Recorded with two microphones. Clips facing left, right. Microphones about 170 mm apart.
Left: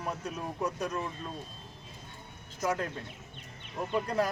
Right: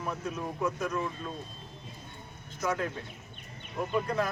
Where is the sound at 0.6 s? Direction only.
35° left (ahead or behind).